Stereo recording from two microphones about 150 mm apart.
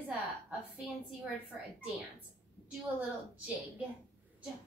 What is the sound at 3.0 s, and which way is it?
Speech, 10° right (ahead or behind).